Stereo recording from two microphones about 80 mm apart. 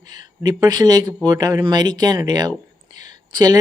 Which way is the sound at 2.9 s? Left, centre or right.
Right.